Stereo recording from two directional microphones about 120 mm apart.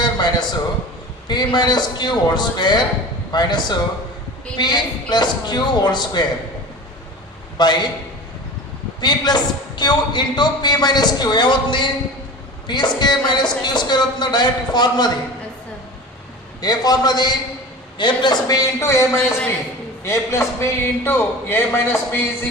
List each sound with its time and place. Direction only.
0.0 s a sound: 35° left (ahead or behind)
1.3 s a man's voice: 35° left (ahead or behind)
7.6 s a man's voice: 35° left (ahead or behind)
9.0 s a man's voice: 35° left (ahead or behind)
16.6 s a man's voice: 35° left (ahead or behind)